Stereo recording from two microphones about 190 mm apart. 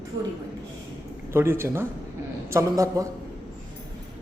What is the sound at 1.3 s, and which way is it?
Speech, 10° right (ahead or behind).